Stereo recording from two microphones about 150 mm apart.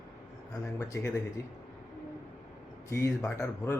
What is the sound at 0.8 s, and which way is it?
Speech, 20° left (ahead or behind).